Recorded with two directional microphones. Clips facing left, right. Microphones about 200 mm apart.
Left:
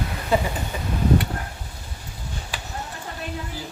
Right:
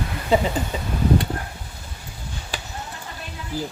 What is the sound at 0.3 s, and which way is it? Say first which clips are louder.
Speech: right 3 dB; 20° right (ahead or behind).